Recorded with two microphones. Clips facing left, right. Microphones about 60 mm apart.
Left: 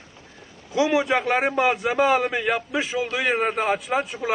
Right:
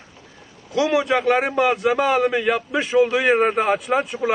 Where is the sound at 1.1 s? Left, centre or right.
Centre.